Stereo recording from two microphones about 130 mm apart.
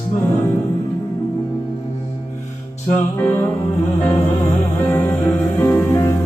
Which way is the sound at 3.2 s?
15° left (ahead or behind).